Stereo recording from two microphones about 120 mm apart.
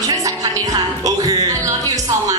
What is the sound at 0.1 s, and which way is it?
Music, 30° right (ahead or behind).